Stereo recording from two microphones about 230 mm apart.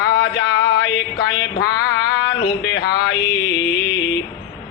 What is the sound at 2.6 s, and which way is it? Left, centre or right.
Mantra, left.